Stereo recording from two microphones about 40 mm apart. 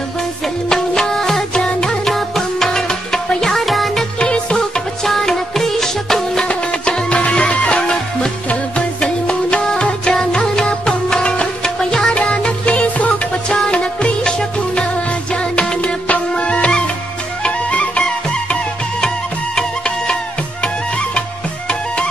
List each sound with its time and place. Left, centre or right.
0.7 s music: centre
2.0 s music: centre
4.2 s music: left
5.0 s music: centre
6.4 s music: left
9.0 s music: left
12.2 s music: left
12.8 s music: left
13.7 s music: left
15.5 s music: left
18.9 s music: centre